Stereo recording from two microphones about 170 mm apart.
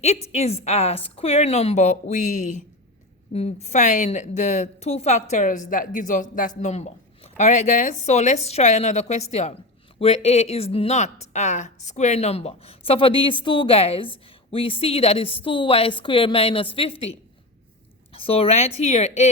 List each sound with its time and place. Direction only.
0.0 s a woman's voice: 40° left (ahead or behind)